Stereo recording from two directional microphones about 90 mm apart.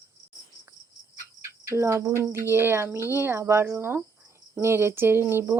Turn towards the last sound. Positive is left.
turn(degrees=-25)  # may be behind; listen again after turning